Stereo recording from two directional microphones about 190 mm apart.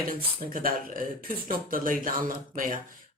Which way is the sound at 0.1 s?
50° right (ahead or behind).